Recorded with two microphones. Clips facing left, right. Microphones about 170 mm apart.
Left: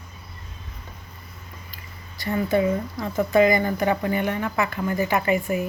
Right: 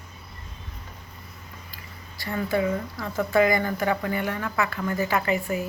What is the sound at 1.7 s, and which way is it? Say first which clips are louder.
Speech: even; 20° left (ahead or behind).